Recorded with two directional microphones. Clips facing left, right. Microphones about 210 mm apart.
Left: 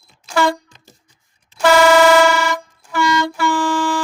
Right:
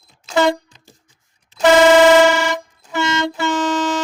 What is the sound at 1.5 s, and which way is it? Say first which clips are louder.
Air horn: right 2 dB; 20° right (ahead or behind).